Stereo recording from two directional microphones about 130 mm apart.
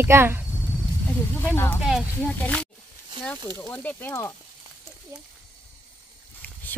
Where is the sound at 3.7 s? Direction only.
15° left (ahead or behind).